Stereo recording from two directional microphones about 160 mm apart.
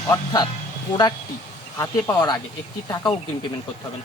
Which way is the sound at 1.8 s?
20° left (ahead or behind).